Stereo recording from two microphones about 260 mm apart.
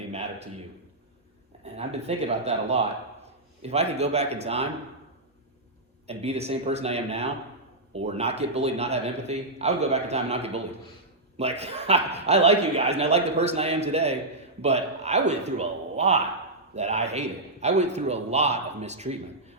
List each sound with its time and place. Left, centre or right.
0.1 s a sound: right
1.6 s a man's voice: right
6.1 s a man's voice: right